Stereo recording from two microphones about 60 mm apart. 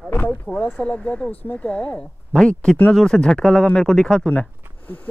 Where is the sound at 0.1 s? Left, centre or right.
Left.